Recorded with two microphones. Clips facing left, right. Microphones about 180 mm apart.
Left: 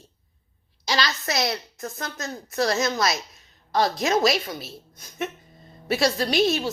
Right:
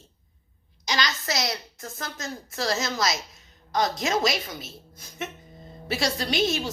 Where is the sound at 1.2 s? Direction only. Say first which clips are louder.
Left 3 dB; 25° left (ahead or behind).